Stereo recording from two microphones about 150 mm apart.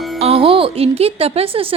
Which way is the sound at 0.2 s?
40° right (ahead or behind).